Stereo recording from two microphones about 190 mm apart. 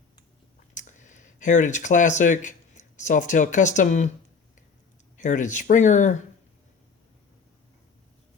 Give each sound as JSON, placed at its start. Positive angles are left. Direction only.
{"t": 0.7, "sound": "speech", "side_deg": 40}
{"t": 5.1, "sound": "speech", "side_deg": 40}